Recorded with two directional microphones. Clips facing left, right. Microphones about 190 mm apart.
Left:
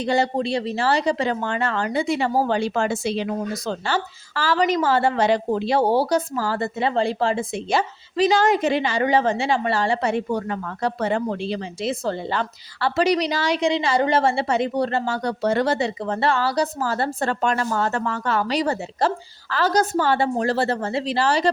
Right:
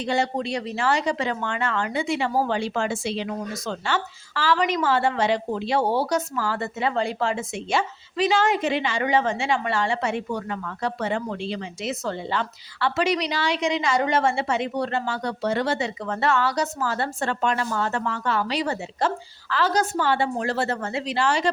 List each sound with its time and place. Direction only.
0.0 s speech: 35° left (ahead or behind)